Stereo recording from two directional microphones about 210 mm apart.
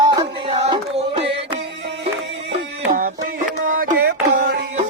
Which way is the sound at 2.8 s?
40° right (ahead or behind).